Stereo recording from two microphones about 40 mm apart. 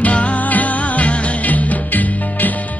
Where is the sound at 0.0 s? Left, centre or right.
Left.